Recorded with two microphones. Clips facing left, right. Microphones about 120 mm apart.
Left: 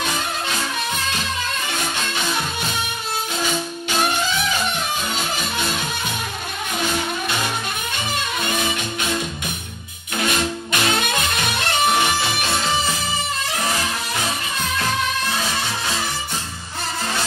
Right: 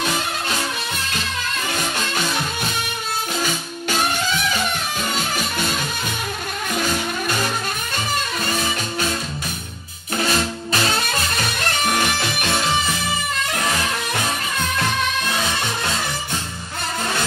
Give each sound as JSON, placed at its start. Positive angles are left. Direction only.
{"t": 10.1, "sound": "music", "side_deg": -35}